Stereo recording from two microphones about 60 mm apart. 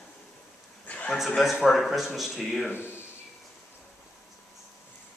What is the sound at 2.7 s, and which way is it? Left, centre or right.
Speech, left.